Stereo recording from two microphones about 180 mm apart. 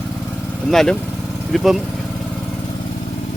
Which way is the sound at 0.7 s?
Centre (ahead or behind).